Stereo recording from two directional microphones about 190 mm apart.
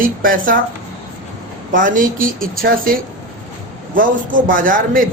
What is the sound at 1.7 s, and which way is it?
A man's voice, 45° right (ahead or behind).